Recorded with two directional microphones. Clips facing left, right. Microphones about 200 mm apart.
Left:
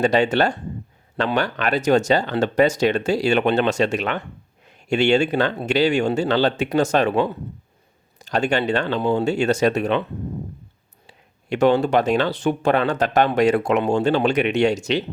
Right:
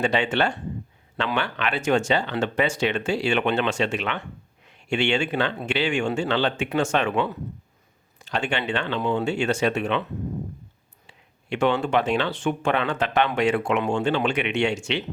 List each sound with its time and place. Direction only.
0.0 s speech: 40° left (ahead or behind)
11.0 s speech: 40° left (ahead or behind)